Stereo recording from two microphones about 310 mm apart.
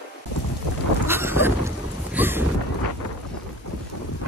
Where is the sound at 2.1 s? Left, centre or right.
Centre.